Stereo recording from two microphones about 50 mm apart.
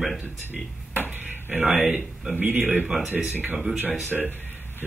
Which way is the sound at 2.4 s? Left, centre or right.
Right.